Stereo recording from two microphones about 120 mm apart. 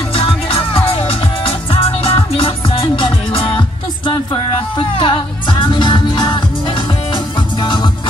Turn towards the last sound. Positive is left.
turn(degrees=40)  # may be behind; listen again after turning